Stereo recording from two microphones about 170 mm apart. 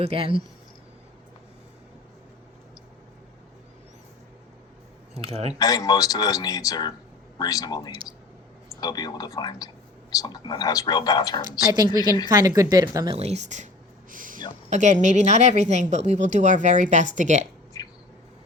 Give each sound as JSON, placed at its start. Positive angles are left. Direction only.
{"t": 0.0, "sound": "speech", "side_deg": -35}
{"t": 5.2, "sound": "speech", "side_deg": -35}
{"t": 5.5, "sound": "speech", "side_deg": 20}
{"t": 11.4, "sound": "speech", "side_deg": -25}
{"t": 11.9, "sound": "speech", "side_deg": 25}
{"t": 12.3, "sound": "speech", "side_deg": -20}
{"t": 13.1, "sound": "speech", "side_deg": -35}
{"t": 14.1, "sound": "a sound", "side_deg": -50}
{"t": 14.7, "sound": "speech", "side_deg": -45}
{"t": 17.7, "sound": "a sound", "side_deg": 20}